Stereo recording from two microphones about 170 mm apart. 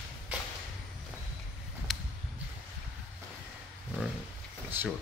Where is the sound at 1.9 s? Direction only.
Centre (ahead or behind).